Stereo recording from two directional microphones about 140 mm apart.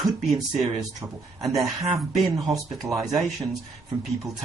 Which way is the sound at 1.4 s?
Centre (ahead or behind).